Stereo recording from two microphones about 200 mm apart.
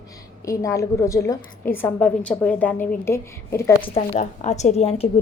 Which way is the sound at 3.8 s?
35° left (ahead or behind).